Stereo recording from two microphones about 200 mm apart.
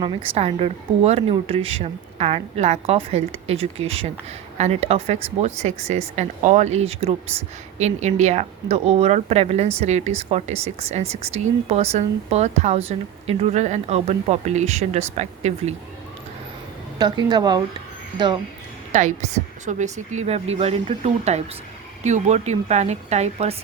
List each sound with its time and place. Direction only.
0.3 s speech: 30° right (ahead or behind)
17.0 s a woman's voice: 20° right (ahead or behind)
18.9 s a woman's voice: 35° right (ahead or behind)